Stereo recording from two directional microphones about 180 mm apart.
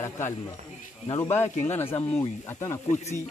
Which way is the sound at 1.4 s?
40° left (ahead or behind).